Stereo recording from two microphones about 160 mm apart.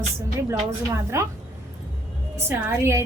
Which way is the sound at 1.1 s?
20° right (ahead or behind).